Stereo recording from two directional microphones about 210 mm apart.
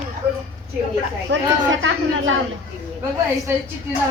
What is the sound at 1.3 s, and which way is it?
Speech, 60° right (ahead or behind).